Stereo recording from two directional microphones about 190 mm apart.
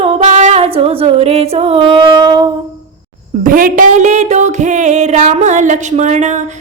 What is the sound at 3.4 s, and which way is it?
Female singing, 45° right (ahead or behind).